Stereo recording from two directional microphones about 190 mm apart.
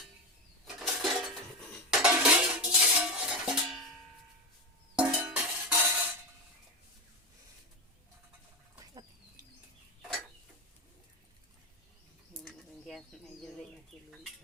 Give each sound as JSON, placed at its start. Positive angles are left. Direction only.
{"t": 0.7, "sound": "dishes", "side_deg": 0}
{"t": 1.9, "sound": "music", "side_deg": -5}
{"t": 4.9, "sound": "music", "side_deg": -5}
{"t": 12.4, "sound": "bird", "side_deg": 0}